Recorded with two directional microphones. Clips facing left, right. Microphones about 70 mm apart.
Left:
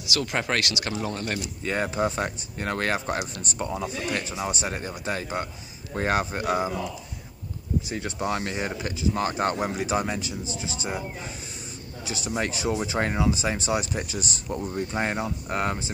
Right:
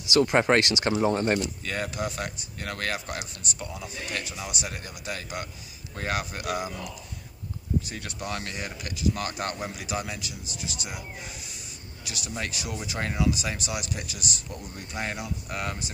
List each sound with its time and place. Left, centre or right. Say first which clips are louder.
0.1 s speech: right 6 dB; right
1.6 s speech: left 5 dB; left
7.9 s a man's voice: left 6 dB; left